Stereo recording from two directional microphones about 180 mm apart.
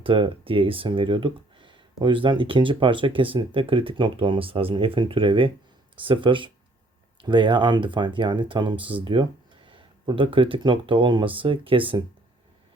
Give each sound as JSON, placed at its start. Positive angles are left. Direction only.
{"t": 0.0, "sound": "speech", "side_deg": -30}